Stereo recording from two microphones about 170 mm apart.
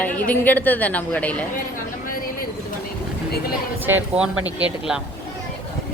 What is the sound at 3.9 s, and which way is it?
Speech, 10° right (ahead or behind).